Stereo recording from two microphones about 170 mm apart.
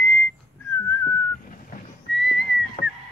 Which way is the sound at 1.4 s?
55° left (ahead or behind).